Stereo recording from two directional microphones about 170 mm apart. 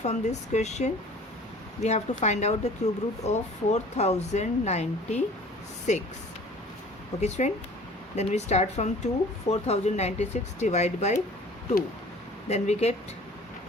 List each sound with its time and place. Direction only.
0.0 s speech: 40° left (ahead or behind)
7.2 s speech: 40° left (ahead or behind)
12.5 s speech: 40° left (ahead or behind)